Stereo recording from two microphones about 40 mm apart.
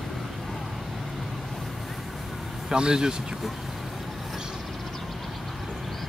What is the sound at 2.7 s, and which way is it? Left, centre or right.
Speech, centre.